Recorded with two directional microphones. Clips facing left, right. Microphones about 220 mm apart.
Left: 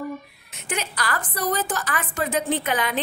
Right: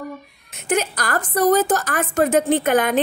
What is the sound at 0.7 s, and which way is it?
A woman's voice, 45° right (ahead or behind).